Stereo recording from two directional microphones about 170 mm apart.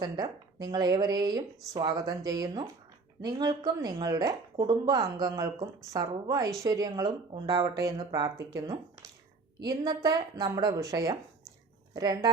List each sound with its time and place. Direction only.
0.0 s speech: 25° right (ahead or behind)